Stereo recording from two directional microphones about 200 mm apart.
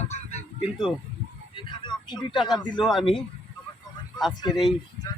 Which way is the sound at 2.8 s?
Centre (ahead or behind).